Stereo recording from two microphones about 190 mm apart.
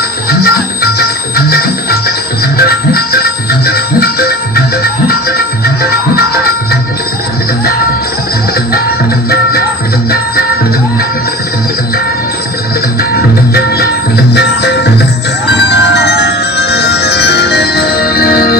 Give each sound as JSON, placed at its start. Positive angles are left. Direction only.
{"t": 0.3, "sound": "music", "side_deg": 55}
{"t": 9.3, "sound": "music", "side_deg": 55}
{"t": 13.5, "sound": "music", "side_deg": 55}